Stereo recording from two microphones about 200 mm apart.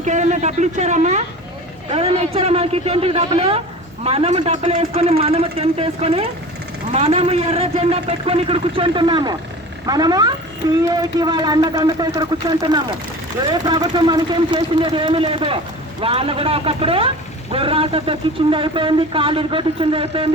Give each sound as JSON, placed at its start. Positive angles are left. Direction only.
{"t": 0.0, "sound": "speech", "side_deg": -35}